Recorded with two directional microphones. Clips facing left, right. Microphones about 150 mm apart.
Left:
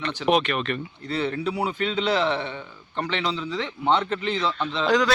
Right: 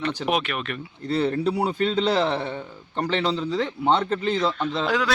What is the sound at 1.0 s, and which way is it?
A man's voice, 35° right (ahead or behind).